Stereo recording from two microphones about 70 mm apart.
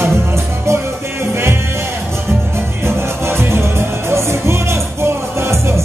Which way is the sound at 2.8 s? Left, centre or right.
Right.